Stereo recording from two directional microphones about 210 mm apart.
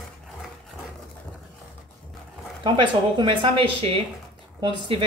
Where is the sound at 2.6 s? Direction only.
25° right (ahead or behind).